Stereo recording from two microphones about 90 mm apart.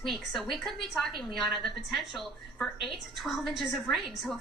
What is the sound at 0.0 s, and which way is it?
A woman's voice, centre (ahead or behind).